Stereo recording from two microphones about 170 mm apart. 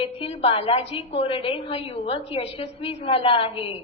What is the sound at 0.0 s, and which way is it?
A woman's voice, 35° left (ahead or behind).